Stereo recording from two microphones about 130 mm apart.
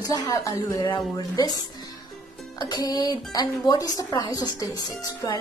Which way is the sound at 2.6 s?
30° left (ahead or behind).